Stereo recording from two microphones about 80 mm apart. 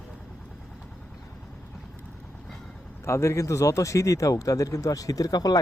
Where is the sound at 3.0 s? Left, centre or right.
Left.